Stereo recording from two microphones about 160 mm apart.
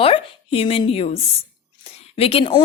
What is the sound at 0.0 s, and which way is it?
A woman's voice, 35° left (ahead or behind).